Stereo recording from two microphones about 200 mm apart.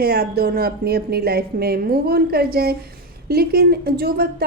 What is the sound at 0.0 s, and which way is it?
Speech, 50° right (ahead or behind).